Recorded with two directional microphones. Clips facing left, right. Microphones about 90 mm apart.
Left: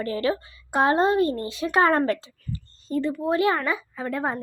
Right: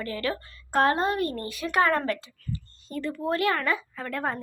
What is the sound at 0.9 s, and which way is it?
Speech, 25° left (ahead or behind).